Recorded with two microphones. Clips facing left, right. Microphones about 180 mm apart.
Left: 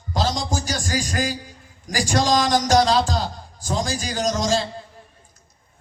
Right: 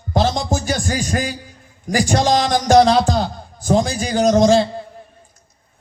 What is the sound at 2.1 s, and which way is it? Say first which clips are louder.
A man's voice: right 1 dB; 55° right (ahead or behind).